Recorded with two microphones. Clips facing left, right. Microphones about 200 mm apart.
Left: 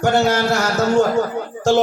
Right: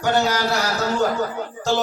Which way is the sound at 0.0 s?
45° left (ahead or behind).